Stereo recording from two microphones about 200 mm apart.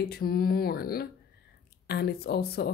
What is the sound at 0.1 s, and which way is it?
Speech, 50° left (ahead or behind).